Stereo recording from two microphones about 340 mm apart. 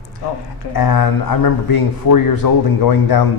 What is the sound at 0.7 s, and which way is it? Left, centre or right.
Speech, left.